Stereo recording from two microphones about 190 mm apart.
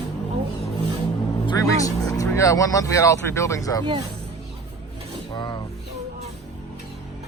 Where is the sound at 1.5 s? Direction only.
20° left (ahead or behind).